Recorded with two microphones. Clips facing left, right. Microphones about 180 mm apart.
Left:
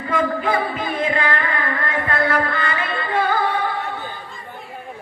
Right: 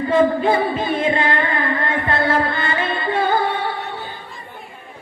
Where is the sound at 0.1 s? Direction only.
25° right (ahead or behind).